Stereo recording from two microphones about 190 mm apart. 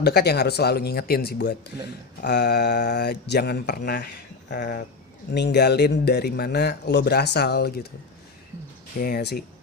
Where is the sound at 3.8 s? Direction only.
50° left (ahead or behind).